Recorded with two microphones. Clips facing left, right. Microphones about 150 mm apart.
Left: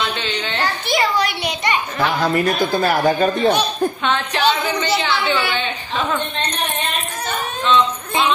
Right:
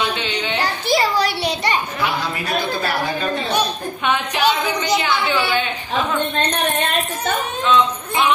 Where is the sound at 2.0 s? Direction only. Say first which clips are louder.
Left 5 dB; 45° left (ahead or behind).